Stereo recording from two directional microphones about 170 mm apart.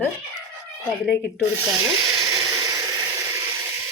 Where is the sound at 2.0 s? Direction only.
20° right (ahead or behind).